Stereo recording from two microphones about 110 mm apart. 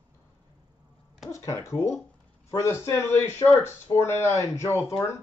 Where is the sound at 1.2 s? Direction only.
30° left (ahead or behind).